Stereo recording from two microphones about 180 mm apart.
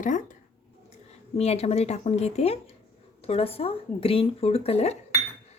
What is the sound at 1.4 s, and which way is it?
A woman's voice, 35° left (ahead or behind).